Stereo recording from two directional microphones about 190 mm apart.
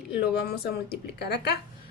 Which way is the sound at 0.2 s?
55° left (ahead or behind).